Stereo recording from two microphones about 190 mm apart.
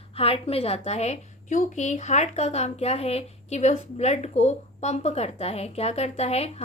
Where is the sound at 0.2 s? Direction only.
30° left (ahead or behind).